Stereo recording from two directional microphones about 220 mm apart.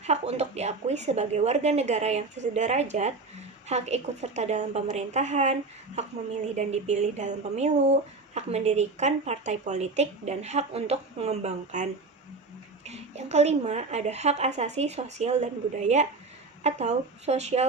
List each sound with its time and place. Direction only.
0.0 s speech: 30° right (ahead or behind)
6.6 s speech: 30° right (ahead or behind)